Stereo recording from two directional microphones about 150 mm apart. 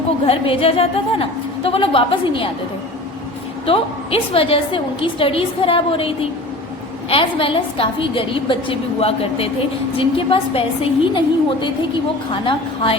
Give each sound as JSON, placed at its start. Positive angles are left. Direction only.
{"t": 0.3, "sound": "a woman's voice", "side_deg": 40}
{"t": 3.7, "sound": "a woman's voice", "side_deg": 40}
{"t": 12.3, "sound": "a woman's voice", "side_deg": 35}